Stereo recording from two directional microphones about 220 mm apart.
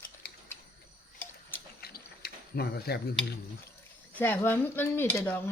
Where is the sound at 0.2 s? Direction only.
45° left (ahead or behind).